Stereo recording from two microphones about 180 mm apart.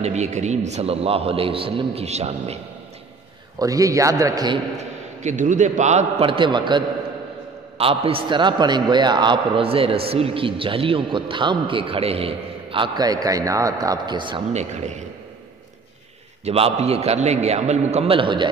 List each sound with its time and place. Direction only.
0.0 s a man's voice: 40° right (ahead or behind)
3.5 s a man's voice: 20° right (ahead or behind)
4.7 s a man's voice: 40° right (ahead or behind); by 14.4 s 25° right (ahead or behind)
14.5 s a man's voice: 40° right (ahead or behind)
16.4 s a man's voice: 35° right (ahead or behind)